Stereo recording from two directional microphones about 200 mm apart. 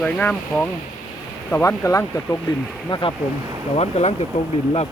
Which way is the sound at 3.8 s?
35° left (ahead or behind).